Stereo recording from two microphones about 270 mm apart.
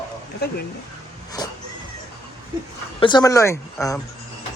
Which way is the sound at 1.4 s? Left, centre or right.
Centre.